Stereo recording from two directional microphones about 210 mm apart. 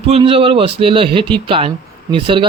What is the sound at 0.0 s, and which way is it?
Speech, 25° right (ahead or behind).